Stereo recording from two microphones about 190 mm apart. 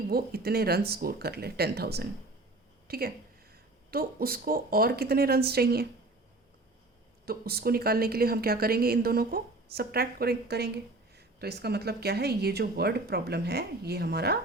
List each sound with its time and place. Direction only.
0.1 s a woman's voice: 55° right (ahead or behind)
7.3 s a woman's voice: 55° right (ahead or behind)